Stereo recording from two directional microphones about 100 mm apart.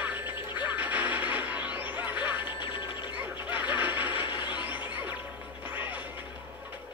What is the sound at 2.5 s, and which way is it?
Music, 50° left (ahead or behind).